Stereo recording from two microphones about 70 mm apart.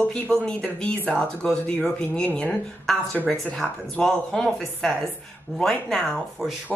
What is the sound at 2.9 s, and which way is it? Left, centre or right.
Speech, centre.